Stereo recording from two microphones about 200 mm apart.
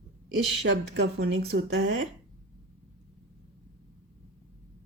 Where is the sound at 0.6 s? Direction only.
60° right (ahead or behind).